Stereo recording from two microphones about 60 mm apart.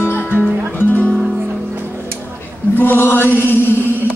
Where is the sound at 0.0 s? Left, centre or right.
Left.